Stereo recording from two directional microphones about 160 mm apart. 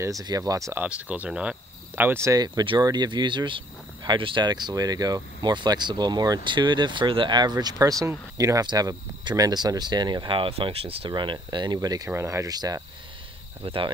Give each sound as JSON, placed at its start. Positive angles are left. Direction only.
{"t": 0.2, "sound": "speech", "side_deg": -20}
{"t": 0.8, "sound": "speech", "side_deg": -10}
{"t": 13.6, "sound": "speech", "side_deg": -35}